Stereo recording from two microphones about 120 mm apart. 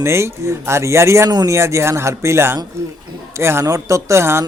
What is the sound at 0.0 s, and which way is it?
Speech, 20° right (ahead or behind).